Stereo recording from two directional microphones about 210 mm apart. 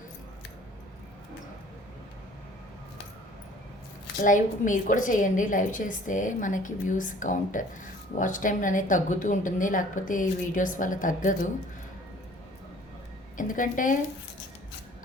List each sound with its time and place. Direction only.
4.2 s a woman's voice: 40° left (ahead or behind)
13.3 s a woman's voice: 40° left (ahead or behind)